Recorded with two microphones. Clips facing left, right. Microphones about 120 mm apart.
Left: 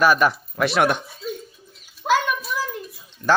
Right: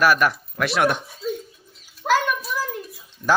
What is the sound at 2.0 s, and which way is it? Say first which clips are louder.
Bird: even; centre (ahead or behind).